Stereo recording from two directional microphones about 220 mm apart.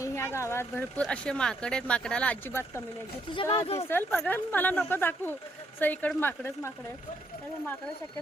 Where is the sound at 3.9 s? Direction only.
10° left (ahead or behind).